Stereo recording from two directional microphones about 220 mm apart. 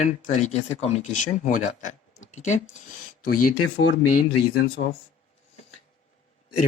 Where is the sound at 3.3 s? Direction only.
90° left.